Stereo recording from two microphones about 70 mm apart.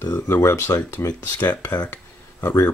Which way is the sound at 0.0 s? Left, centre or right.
Left.